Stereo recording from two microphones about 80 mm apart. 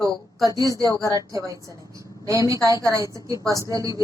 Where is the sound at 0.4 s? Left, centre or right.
Right.